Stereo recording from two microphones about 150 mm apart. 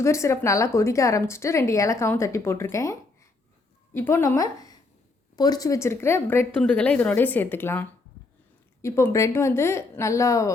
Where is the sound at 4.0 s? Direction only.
15° left (ahead or behind).